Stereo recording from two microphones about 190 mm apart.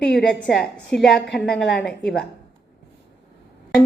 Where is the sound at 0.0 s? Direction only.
5° left (ahead or behind).